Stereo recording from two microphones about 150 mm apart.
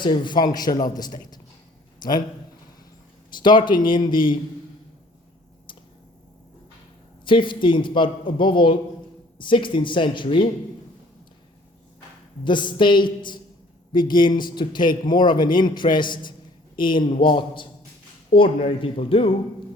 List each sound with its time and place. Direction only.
0.0 s a man's voice: 30° left (ahead or behind)
3.3 s a man's voice: 30° left (ahead or behind)
7.3 s a man's voice: 35° left (ahead or behind)
12.5 s a man's voice: 30° left (ahead or behind)